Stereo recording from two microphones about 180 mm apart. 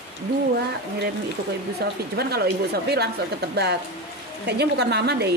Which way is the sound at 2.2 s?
60° right (ahead or behind).